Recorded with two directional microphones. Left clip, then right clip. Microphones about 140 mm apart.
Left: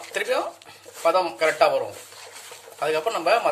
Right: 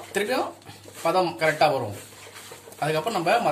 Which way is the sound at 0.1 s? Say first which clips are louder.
Left 1 dB; 75° left (ahead or behind).